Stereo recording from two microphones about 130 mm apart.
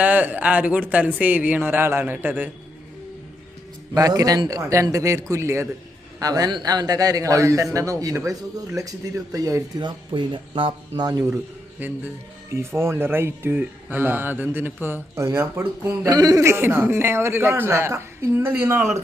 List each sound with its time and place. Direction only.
0.0 s speech: 10° right (ahead or behind)
3.9 s a man's voice: 25° right (ahead or behind)
11.8 s speech: 15° right (ahead or behind)
16.0 s a man's voice: 30° right (ahead or behind)